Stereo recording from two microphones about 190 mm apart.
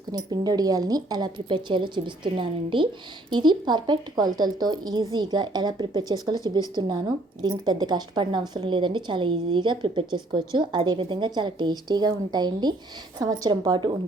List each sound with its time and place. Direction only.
0.1 s a woman's voice: 20° right (ahead or behind)